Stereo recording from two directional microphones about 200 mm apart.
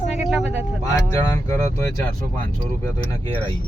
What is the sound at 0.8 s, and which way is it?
Speech, 15° left (ahead or behind).